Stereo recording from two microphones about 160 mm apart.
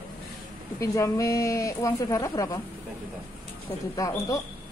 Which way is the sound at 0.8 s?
20° left (ahead or behind).